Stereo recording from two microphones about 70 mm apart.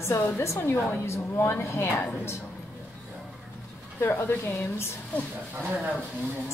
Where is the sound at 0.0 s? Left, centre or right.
Left.